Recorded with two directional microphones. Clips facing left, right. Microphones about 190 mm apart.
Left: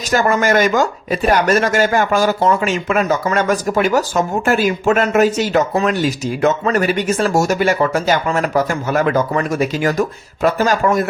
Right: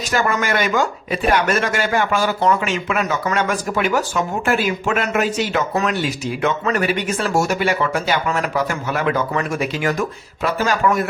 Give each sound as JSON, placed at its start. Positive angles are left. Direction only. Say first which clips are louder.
{"t": 0.1, "sound": "speech", "louder": "left 6 dB", "side_deg": 40}